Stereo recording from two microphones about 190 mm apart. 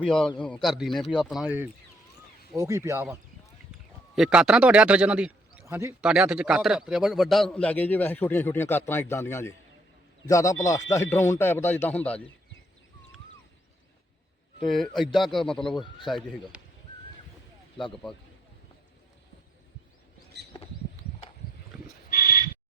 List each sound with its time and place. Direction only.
0.0 s a man's voice: 5° left (ahead or behind)
14.7 s a man's voice: centre (ahead or behind)
22.1 s a sound: 50° left (ahead or behind)